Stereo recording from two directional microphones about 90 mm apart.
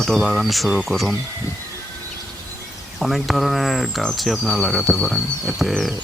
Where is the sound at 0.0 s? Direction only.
Centre (ahead or behind).